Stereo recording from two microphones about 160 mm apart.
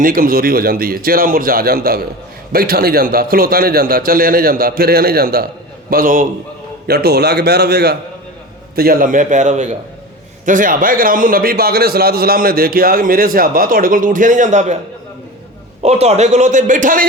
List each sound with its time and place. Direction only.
0.0 s a man's voice: 60° right (ahead or behind)
5.9 s a man's voice: 60° right (ahead or behind)
6.8 s a man's voice: 85° right
8.7 s a man's voice: 65° right (ahead or behind); by 14.8 s 50° right (ahead or behind)
15.8 s a man's voice: 40° right (ahead or behind)